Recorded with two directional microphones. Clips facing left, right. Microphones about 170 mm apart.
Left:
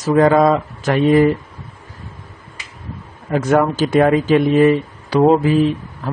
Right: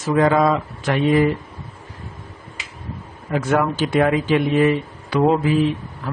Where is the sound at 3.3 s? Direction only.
40° left (ahead or behind).